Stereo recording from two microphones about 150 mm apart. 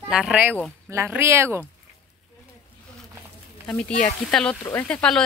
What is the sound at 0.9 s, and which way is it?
Speech, 15° right (ahead or behind).